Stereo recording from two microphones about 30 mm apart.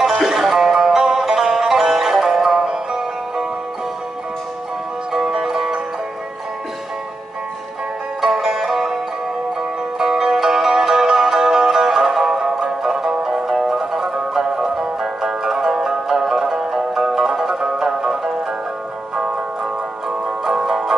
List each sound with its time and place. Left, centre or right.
0.2 s music: centre
5.4 s music: centre
8.2 s music: centre
9.9 s music: centre
19.1 s music: right
20.4 s music: centre